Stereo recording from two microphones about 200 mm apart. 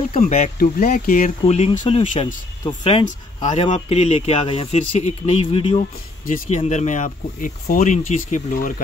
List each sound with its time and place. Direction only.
0.2 s speech: 40° left (ahead or behind)
1.4 s speech: 30° left (ahead or behind)
6.2 s speech: 40° left (ahead or behind)